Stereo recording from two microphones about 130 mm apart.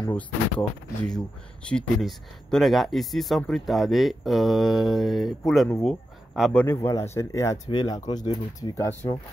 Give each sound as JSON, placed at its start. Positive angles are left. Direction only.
{"t": 0.1, "sound": "speech", "side_deg": 5}
{"t": 6.5, "sound": "speech", "side_deg": 15}
{"t": 7.7, "sound": "speech", "side_deg": 35}